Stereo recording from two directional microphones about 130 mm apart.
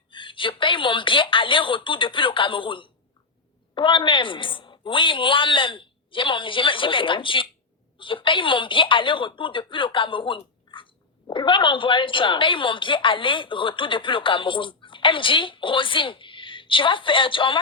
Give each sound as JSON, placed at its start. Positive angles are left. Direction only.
{"t": 0.1, "sound": "a woman's voice", "side_deg": 40}